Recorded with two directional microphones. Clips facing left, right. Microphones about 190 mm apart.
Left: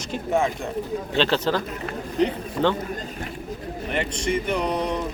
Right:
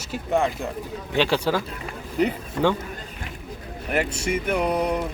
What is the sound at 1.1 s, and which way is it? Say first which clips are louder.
A man's voice: right 1 dB; 10° right (ahead or behind).